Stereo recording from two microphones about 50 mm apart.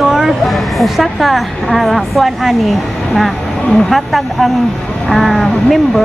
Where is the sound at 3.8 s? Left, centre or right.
Centre.